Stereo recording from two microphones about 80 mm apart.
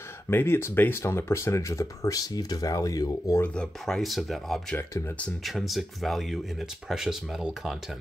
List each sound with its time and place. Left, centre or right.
0.3 s speech: left
3.4 s speech: centre